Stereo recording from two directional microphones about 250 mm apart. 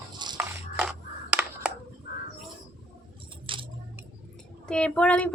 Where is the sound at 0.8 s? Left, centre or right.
Centre.